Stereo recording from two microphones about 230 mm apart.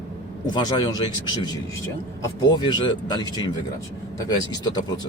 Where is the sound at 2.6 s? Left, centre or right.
Centre.